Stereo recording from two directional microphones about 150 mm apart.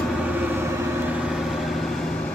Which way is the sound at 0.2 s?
10° right (ahead or behind).